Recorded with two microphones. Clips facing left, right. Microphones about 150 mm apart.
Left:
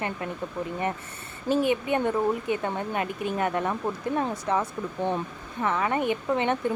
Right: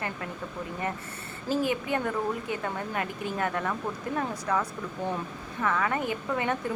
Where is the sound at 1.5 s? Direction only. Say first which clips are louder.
Left 4 dB; 20° left (ahead or behind).